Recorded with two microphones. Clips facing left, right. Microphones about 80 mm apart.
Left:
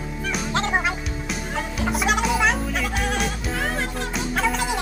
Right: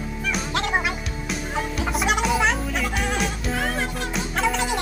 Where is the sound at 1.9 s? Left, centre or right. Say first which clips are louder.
Even; centre.